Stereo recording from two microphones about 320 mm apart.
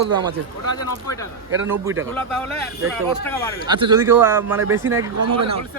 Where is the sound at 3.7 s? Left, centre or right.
Centre.